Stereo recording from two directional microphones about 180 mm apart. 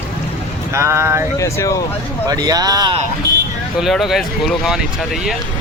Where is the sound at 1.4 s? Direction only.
15° left (ahead or behind).